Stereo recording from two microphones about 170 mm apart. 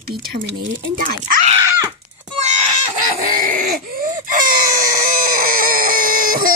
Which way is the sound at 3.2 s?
55° right (ahead or behind).